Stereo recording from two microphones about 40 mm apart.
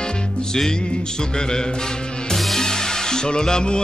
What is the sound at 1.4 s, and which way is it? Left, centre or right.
Music, centre.